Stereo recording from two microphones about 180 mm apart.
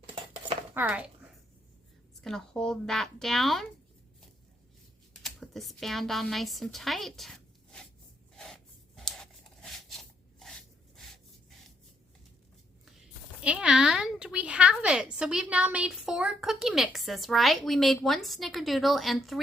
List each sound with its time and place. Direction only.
0.0 s dishes: 30° right (ahead or behind)
0.7 s speech: 10° right (ahead or behind)
2.2 s speech: 5° left (ahead or behind)
5.2 s a woman's voice: centre (ahead or behind)
8.4 s a sound: centre (ahead or behind)
12.8 s a woman's voice: 5° right (ahead or behind)